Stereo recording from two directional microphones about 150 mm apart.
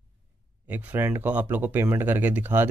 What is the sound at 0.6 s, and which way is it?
Speech, 15° right (ahead or behind).